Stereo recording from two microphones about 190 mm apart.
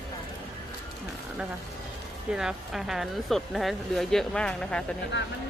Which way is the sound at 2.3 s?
5° right (ahead or behind).